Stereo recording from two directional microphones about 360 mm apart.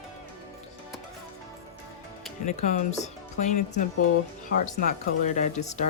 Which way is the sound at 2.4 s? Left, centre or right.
Centre.